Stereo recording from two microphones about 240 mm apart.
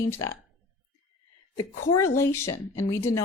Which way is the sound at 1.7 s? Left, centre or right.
Left.